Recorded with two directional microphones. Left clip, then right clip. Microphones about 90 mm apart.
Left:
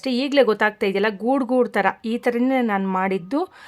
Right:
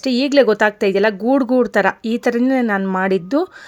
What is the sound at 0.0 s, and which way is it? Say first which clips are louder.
A woman's voice: right 4 dB; 30° right (ahead or behind).